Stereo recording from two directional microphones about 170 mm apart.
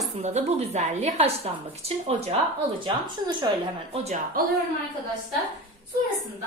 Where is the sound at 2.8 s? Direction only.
25° right (ahead or behind).